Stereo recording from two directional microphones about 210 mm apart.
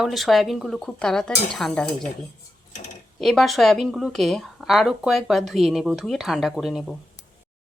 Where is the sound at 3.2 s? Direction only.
Centre (ahead or behind).